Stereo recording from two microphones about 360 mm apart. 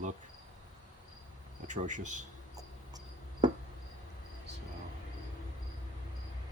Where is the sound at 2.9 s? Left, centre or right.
Centre.